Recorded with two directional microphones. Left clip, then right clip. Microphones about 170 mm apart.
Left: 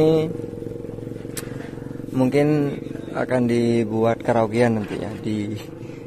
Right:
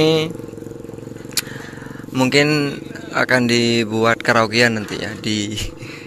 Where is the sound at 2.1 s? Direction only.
Centre (ahead or behind).